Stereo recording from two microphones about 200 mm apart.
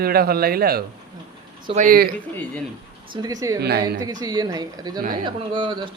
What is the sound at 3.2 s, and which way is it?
Speech, 15° right (ahead or behind).